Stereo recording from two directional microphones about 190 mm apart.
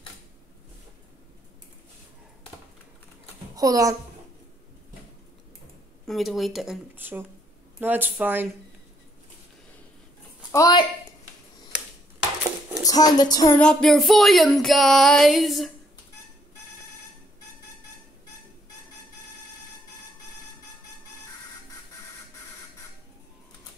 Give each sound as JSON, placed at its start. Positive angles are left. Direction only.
{"t": 3.5, "sound": "a child's voice", "side_deg": -20}
{"t": 6.0, "sound": "music", "side_deg": 0}
{"t": 7.8, "sound": "speech", "side_deg": -10}
{"t": 10.5, "sound": "a woman's voice", "side_deg": 20}
{"t": 12.8, "sound": "speech", "side_deg": 20}
{"t": 13.6, "sound": "music", "side_deg": 5}